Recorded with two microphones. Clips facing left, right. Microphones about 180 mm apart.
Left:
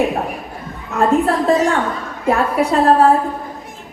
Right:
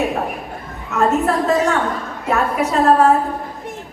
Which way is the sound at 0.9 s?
35° left (ahead or behind).